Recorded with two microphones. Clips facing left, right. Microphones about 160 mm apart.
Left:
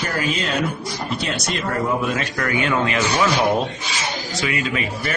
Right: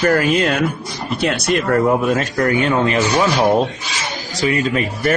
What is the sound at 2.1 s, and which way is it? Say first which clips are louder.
Speech: right 7 dB; 40° right (ahead or behind).